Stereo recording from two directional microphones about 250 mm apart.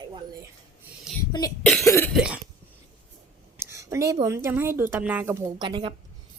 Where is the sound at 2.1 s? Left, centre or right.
Centre.